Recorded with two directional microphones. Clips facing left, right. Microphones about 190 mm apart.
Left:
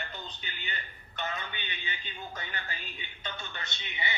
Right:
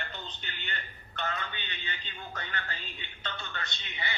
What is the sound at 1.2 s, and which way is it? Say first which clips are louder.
A man's voice: right 1 dB; 15° left (ahead or behind).